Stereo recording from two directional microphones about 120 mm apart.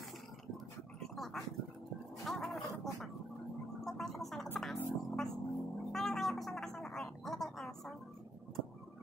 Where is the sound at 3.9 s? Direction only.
Centre (ahead or behind).